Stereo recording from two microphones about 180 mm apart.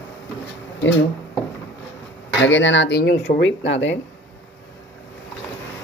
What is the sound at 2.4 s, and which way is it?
Speech, 90° left.